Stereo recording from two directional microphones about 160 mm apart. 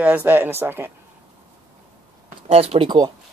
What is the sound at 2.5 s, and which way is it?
Speech, 40° right (ahead or behind).